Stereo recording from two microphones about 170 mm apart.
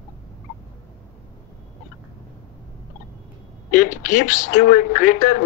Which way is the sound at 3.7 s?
50° left (ahead or behind).